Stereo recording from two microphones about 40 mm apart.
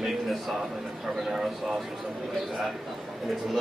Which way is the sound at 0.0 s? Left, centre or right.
Centre.